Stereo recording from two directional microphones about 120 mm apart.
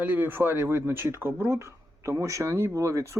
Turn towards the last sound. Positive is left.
turn(degrees=-25)  # may be behind; listen again after turning